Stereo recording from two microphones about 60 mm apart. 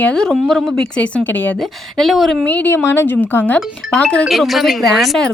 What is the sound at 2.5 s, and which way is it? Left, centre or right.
Speech, left.